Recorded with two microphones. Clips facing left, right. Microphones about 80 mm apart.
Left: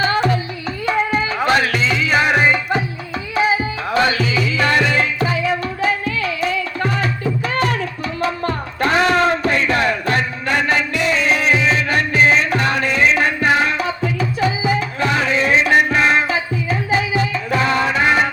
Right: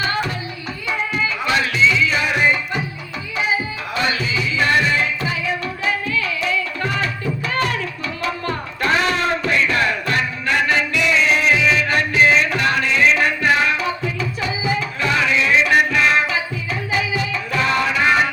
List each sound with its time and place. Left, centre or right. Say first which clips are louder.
0.9 s music: left 4 dB; left
3.3 s tabla: left 4 dB; left
4.4 s music: even; left